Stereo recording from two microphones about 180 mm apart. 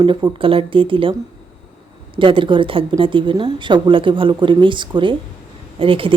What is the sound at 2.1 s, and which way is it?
Speech, 30° right (ahead or behind).